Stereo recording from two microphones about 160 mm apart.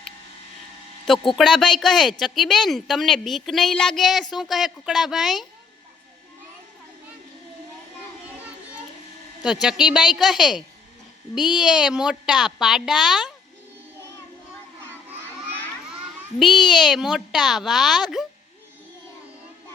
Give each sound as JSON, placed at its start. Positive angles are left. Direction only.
{"t": 1.4, "sound": "a woman's voice", "side_deg": 5}
{"t": 9.4, "sound": "a woman's voice", "side_deg": -5}
{"t": 16.4, "sound": "a woman's voice", "side_deg": 0}